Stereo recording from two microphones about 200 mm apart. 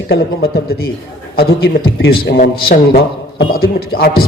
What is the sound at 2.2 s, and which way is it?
A man's voice, 45° left (ahead or behind).